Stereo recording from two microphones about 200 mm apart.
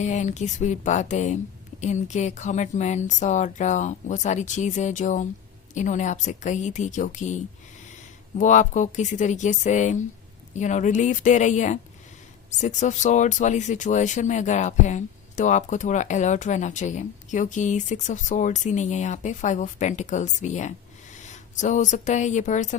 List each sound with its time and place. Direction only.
0.0 s speech: 35° left (ahead or behind)
8.4 s speech: 40° left (ahead or behind)